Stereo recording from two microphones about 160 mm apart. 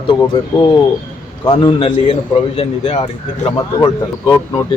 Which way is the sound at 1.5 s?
30° left (ahead or behind).